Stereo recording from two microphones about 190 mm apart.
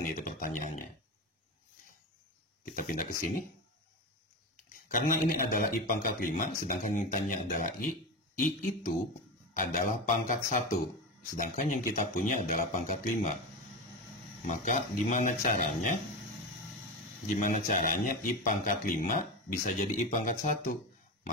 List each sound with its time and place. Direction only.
0.0 s speech: 45° left (ahead or behind)
2.6 s speech: 45° left (ahead or behind)
4.8 s speech: 45° left (ahead or behind)
9.5 s speech: 45° left (ahead or behind)
14.4 s speech: 40° left (ahead or behind)
17.4 s speech: 40° left (ahead or behind)